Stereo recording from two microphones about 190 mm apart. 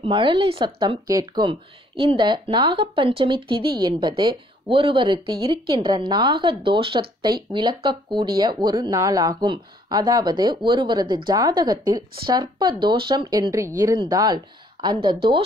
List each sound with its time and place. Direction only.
0.0 s speech: 25° right (ahead or behind)